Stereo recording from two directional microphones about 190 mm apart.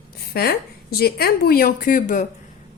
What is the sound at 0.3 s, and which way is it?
A woman's voice, 55° left (ahead or behind).